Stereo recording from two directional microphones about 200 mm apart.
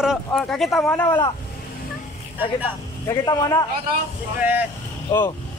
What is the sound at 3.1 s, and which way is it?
Speech, 20° left (ahead or behind).